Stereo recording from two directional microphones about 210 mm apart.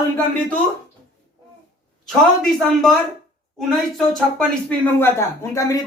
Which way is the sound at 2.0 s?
Centre (ahead or behind).